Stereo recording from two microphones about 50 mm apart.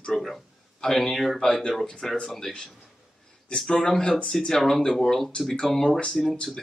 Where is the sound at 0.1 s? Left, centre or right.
Centre.